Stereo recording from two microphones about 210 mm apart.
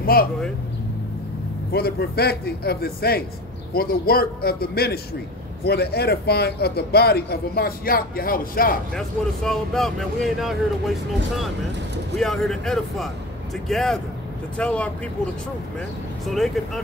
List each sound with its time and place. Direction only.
0.0 s speech: 45° left (ahead or behind)
1.7 s a man's voice: 45° left (ahead or behind)
8.9 s speech: centre (ahead or behind)
16.3 s speech: centre (ahead or behind)